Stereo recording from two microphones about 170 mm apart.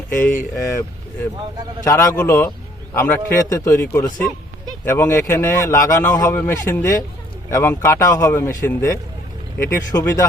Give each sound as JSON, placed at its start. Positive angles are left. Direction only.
{"t": 0.1, "sound": "a man's voice", "side_deg": 10}
{"t": 1.8, "sound": "a man's voice", "side_deg": 20}